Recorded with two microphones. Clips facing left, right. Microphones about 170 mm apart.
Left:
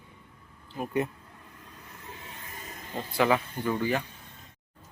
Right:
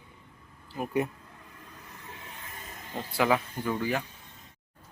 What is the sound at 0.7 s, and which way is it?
Speech, 5° right (ahead or behind).